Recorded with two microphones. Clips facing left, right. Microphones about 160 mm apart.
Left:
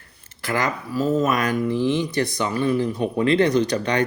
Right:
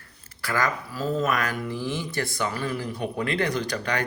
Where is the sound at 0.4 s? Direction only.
20° left (ahead or behind).